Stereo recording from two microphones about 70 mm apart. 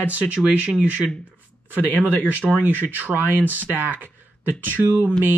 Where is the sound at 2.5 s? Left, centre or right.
Right.